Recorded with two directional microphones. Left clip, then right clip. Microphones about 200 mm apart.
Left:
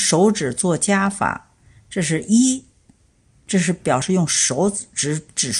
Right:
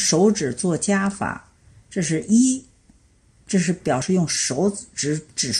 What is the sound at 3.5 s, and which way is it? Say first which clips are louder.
Speech: left 3 dB; 30° left (ahead or behind).